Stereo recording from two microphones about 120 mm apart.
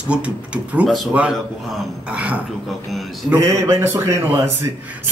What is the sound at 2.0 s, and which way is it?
Speech, 10° right (ahead or behind).